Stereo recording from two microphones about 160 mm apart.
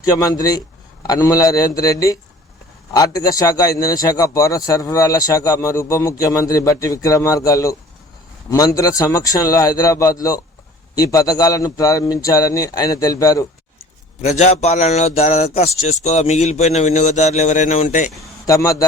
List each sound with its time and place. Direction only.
0.0 s a man's voice: 25° left (ahead or behind)
14.2 s a man's voice: 45° left (ahead or behind)
18.4 s a man's voice: 20° left (ahead or behind)